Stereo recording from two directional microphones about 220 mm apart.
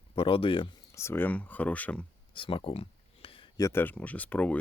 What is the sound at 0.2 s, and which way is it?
Speech, 25° left (ahead or behind).